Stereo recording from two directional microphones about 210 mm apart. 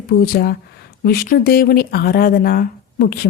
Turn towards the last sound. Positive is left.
turn(degrees=45)  # may be behind; listen again after turning